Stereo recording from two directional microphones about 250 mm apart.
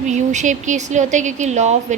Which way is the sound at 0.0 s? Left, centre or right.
Right.